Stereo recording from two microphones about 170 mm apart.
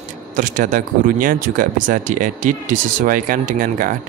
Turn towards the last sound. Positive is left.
turn(degrees=-50)  # may be behind; listen again after turning